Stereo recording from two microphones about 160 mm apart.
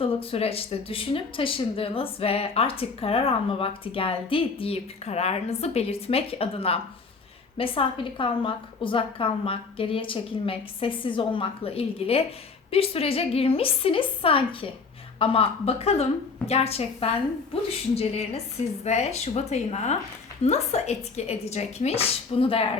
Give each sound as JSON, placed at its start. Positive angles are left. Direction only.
{"t": 0.0, "sound": "speech", "side_deg": 35}